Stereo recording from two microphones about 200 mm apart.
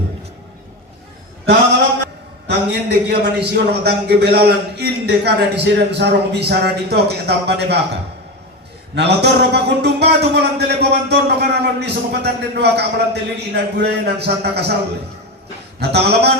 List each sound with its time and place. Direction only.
2.5 s a man's voice: 55° right (ahead or behind)
9.0 s a man's voice: 55° right (ahead or behind)
15.8 s a man's voice: 55° right (ahead or behind)